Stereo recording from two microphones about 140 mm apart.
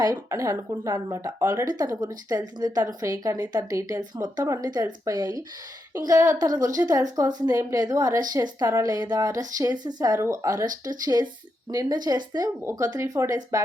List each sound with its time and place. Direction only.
0.0 s a woman's voice: 25° right (ahead or behind)